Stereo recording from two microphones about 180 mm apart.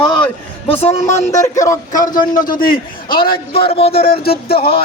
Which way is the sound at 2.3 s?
50° left (ahead or behind).